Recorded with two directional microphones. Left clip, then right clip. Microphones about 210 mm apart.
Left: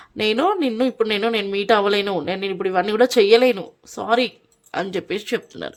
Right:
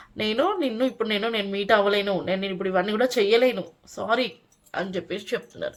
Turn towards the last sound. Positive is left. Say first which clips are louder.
# left 3 dB
turn(degrees=55)  # may be behind; listen again after turning